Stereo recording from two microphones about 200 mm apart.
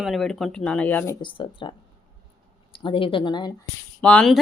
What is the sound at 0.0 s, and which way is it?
A woman's voice, centre (ahead or behind).